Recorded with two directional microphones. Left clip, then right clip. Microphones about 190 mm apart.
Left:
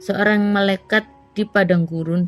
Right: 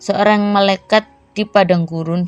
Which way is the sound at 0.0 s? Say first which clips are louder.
Right 5 dB; 20° right (ahead or behind).